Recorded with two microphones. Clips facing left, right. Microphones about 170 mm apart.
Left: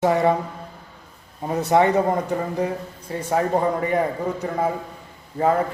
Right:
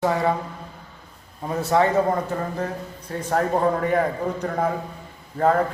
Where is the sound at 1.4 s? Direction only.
20° left (ahead or behind).